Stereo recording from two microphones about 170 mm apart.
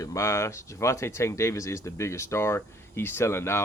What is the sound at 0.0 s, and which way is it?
Speech, 20° left (ahead or behind).